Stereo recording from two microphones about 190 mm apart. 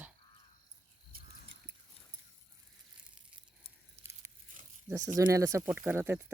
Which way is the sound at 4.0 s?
15° right (ahead or behind).